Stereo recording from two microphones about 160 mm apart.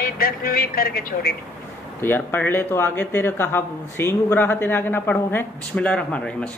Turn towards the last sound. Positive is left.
turn(degrees=5)  # may be behind; listen again after turning